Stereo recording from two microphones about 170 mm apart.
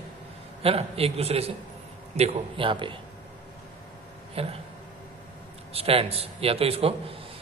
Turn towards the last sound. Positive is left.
turn(degrees=-35)  # may be behind; listen again after turning